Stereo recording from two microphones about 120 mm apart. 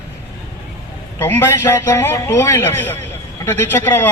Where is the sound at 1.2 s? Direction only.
20° left (ahead or behind).